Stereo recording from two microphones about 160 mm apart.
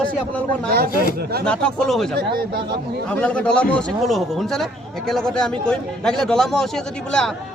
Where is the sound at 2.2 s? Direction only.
75° right (ahead or behind).